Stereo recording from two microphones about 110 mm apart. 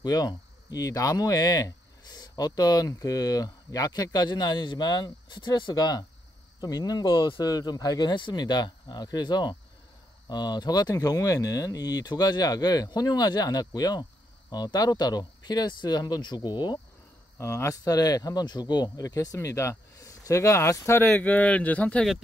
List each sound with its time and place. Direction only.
0.0 s speech: 35° left (ahead or behind)
17.4 s speech: 25° left (ahead or behind)
21.1 s speech: 15° left (ahead or behind)